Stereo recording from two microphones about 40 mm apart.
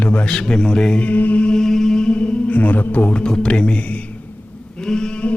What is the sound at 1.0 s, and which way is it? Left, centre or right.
Mantra, left.